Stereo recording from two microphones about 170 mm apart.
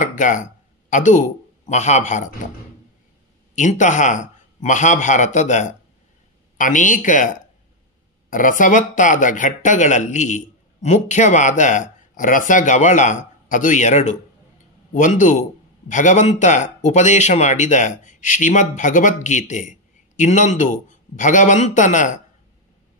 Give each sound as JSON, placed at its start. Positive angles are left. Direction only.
{"t": 0.0, "sound": "speech", "side_deg": 50}
{"t": 3.5, "sound": "speech", "side_deg": 45}